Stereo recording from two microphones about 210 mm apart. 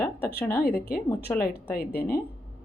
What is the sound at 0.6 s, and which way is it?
Speech, 45° left (ahead or behind).